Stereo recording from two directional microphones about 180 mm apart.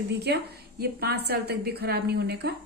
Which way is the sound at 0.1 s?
65° right (ahead or behind).